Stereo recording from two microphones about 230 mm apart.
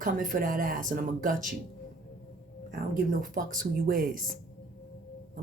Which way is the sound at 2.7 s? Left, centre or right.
Right.